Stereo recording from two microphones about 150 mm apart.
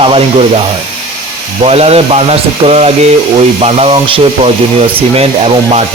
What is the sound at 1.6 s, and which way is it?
Speech, 45° right (ahead or behind).